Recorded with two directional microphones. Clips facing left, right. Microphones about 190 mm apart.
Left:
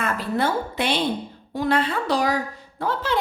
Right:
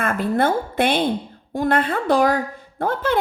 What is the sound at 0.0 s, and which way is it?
A woman's voice, 50° right (ahead or behind).